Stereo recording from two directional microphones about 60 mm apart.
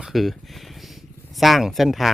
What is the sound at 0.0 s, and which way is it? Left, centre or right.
Speech, centre.